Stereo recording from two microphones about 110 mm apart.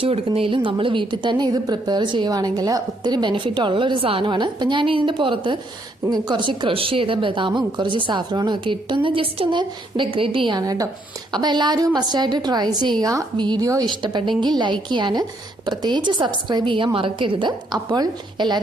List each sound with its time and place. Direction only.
0.0 s a woman's voice: 60° right (ahead or behind)
10.6 s a woman's voice: 35° right (ahead or behind)
13.3 s a woman's voice: 45° right (ahead or behind)
13.6 s a woman's voice: 30° right (ahead or behind)
13.9 s a woman's voice: 45° right (ahead or behind)